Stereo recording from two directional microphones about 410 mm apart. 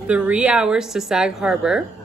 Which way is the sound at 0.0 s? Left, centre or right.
Centre.